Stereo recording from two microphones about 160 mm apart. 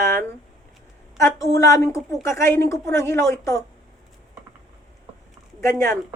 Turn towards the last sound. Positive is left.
turn(degrees=20)  # may be behind; listen again after turning